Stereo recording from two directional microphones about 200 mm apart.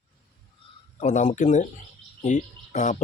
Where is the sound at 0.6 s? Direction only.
25° left (ahead or behind).